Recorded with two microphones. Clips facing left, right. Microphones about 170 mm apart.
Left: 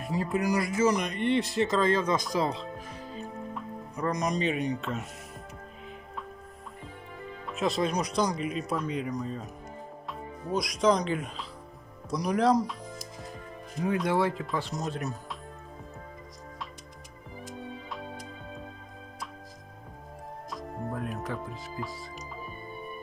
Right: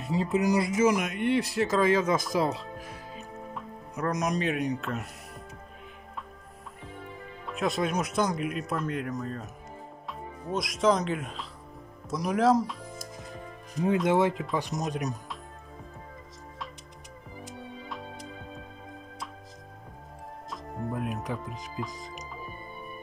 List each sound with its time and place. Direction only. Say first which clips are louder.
0.0 s speech: right 2 dB; 25° right (ahead or behind)
0.8 s speech: right 1 dB; 5° right (ahead or behind)
3.2 s music: left 4 dB; 5° right (ahead or behind)
7.4 s speech: even; centre (ahead or behind)
10.5 s speech: even; centre (ahead or behind)
14.0 s speech: right 3 dB; 20° right (ahead or behind)
20.9 s speech: right 2 dB; 15° right (ahead or behind)